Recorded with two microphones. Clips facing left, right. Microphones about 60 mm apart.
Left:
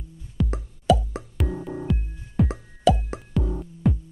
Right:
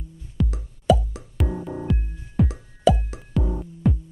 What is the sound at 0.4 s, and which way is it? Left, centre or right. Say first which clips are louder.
Music: even; centre.